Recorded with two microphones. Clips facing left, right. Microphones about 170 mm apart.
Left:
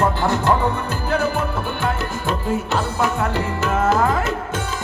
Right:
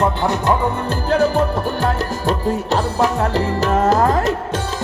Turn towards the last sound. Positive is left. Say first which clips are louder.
# right 3 dB
turn(degrees=-40)  # may be behind; listen again after turning